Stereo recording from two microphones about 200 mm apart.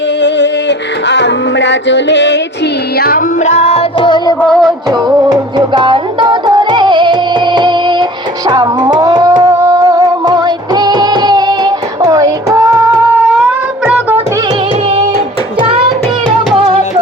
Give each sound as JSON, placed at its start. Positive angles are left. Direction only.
{"t": 0.2, "sound": "music", "side_deg": 60}
{"t": 3.0, "sound": "music", "side_deg": 45}
{"t": 4.4, "sound": "music", "side_deg": 5}
{"t": 4.9, "sound": "music", "side_deg": -20}